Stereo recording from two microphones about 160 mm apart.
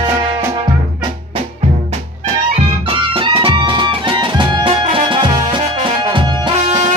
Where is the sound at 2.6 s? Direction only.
35° right (ahead or behind).